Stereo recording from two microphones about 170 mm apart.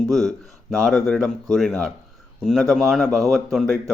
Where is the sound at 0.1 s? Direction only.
Centre (ahead or behind).